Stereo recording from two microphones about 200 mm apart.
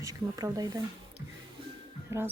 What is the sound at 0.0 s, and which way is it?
Speech, 15° right (ahead or behind).